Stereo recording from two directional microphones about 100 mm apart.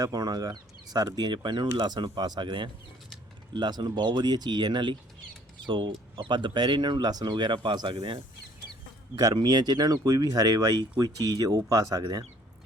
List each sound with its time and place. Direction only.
0.0 s speech: 40° right (ahead or behind); by 8.2 s 60° right (ahead or behind)
9.1 s speech: 45° right (ahead or behind)